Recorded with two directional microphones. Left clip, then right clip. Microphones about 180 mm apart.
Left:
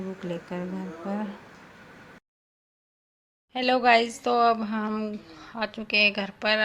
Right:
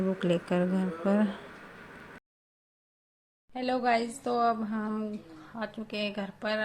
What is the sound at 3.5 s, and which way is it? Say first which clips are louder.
A woman's voice: left 7 dB; 10° left (ahead or behind).